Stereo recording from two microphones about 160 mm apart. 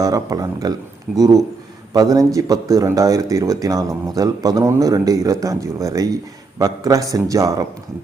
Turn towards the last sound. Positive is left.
turn(degrees=-20)  # may be behind; listen again after turning